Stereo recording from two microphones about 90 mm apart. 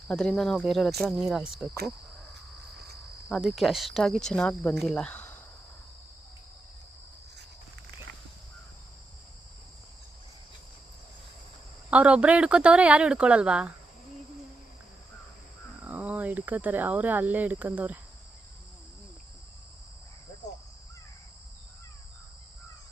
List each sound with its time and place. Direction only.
0.1 s speech: 10° left (ahead or behind)
3.3 s speech: centre (ahead or behind); by 5.4 s 20° left (ahead or behind)
11.9 s speech: 15° right (ahead or behind)
15.8 s speech: 15° right (ahead or behind)